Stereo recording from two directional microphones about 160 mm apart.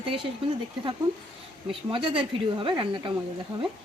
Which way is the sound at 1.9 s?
35° right (ahead or behind).